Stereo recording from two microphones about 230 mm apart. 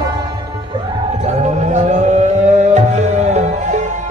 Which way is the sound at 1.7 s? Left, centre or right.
Right.